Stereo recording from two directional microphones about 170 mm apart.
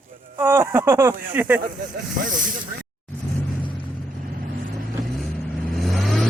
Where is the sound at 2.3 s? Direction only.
50° right (ahead or behind).